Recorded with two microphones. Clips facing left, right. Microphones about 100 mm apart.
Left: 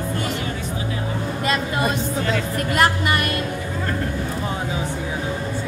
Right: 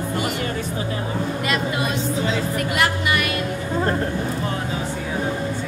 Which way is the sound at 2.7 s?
40° left (ahead or behind).